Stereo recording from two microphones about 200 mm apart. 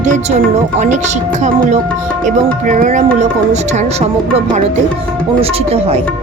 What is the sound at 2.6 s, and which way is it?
Music, 40° right (ahead or behind).